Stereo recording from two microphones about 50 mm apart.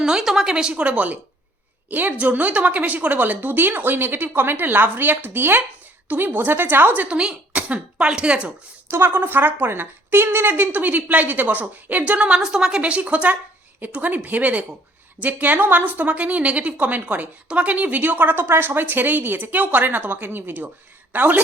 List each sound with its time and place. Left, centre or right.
0.0 s speech: centre
0.5 s speech: centre
9.0 s speech: right; by 12.8 s centre
12.8 s speech: right
18.4 s speech: right